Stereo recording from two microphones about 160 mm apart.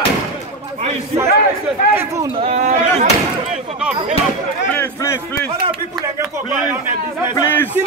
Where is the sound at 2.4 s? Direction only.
45° right (ahead or behind).